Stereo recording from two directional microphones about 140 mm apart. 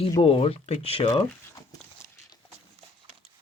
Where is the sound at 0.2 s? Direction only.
45° left (ahead or behind).